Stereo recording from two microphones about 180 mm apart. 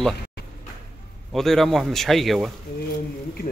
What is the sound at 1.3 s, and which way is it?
Speech, centre (ahead or behind).